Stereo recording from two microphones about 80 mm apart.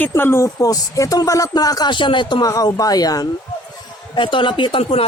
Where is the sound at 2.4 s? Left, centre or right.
Left.